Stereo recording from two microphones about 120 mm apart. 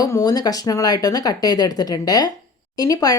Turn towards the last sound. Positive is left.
turn(degrees=30)  # may be behind; listen again after turning